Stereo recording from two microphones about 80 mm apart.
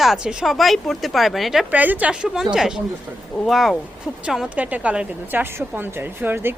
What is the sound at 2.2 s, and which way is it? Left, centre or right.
A woman's voice, centre.